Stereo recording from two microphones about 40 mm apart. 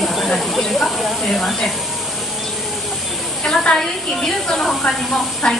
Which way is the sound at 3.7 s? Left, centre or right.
Centre.